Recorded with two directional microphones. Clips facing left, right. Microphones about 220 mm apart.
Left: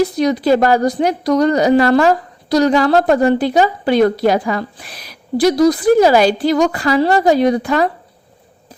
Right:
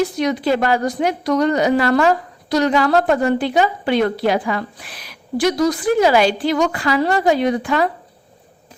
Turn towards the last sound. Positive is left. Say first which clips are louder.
# left 4 dB
turn(degrees=40)  # may be behind; listen again after turning